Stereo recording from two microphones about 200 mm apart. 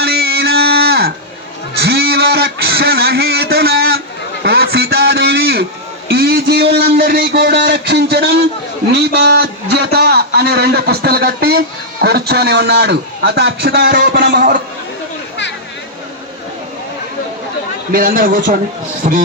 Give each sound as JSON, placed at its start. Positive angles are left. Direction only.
{"t": 0.0, "sound": "music", "side_deg": -50}
{"t": 1.8, "sound": "a sound", "side_deg": -50}
{"t": 6.1, "sound": "a man's voice", "side_deg": -50}
{"t": 17.9, "sound": "a man's voice", "side_deg": -45}